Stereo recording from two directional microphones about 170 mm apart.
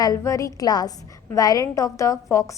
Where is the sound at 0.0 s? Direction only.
20° left (ahead or behind).